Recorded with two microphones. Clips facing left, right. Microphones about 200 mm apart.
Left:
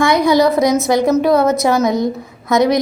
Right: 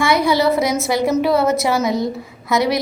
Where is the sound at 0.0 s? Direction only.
15° left (ahead or behind).